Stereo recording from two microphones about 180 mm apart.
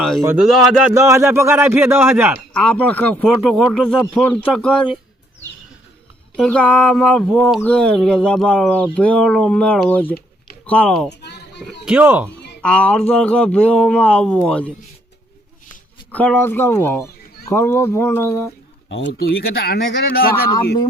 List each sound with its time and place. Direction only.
0.3 s a man's voice: 5° right (ahead or behind)
2.6 s speech: 5° left (ahead or behind)
6.3 s speech: 5° left (ahead or behind)
11.1 s a sound: 70° left (ahead or behind)
11.9 s a man's voice: 10° right (ahead or behind)
12.6 s speech: 5° left (ahead or behind)
16.1 s speech: 10° left (ahead or behind)
18.9 s speech: 80° left; by 20.7 s 60° left (ahead or behind)